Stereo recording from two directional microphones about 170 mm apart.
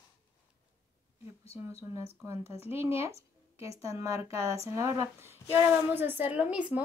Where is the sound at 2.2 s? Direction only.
20° right (ahead or behind).